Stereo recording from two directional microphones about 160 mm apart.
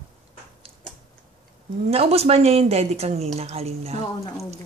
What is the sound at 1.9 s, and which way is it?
Speech, 40° right (ahead or behind).